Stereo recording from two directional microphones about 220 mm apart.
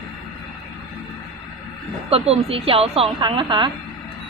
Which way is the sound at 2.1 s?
25° right (ahead or behind).